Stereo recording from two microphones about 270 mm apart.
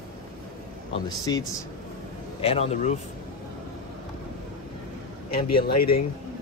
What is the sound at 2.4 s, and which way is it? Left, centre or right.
Speech, left.